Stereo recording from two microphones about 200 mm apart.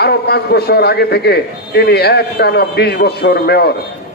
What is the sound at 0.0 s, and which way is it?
A man's voice, 55° left (ahead or behind).